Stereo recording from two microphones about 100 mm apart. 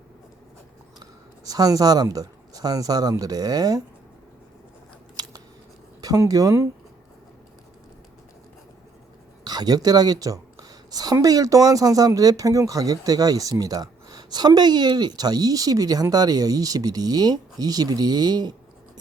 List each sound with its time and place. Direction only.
1.5 s a woman's voice: 40° right (ahead or behind)
5.2 s scissors: 45° right (ahead or behind)
6.0 s a woman's voice: 35° right (ahead or behind)
9.4 s a woman's voice: 40° right (ahead or behind)